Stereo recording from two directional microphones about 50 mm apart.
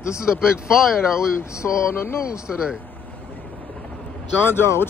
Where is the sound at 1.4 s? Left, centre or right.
Left.